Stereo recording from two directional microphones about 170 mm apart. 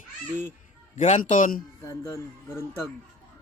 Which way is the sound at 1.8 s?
20° left (ahead or behind).